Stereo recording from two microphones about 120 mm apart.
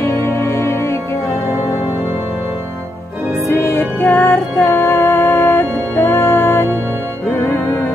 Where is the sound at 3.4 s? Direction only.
20° left (ahead or behind).